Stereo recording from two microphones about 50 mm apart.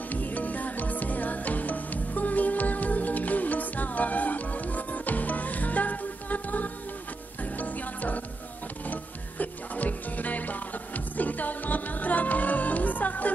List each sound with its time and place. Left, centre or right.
0.1 s music: left